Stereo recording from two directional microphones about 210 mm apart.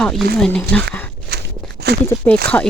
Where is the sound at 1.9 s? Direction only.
50° right (ahead or behind).